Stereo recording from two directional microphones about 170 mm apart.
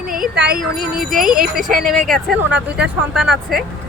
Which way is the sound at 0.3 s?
70° right (ahead or behind).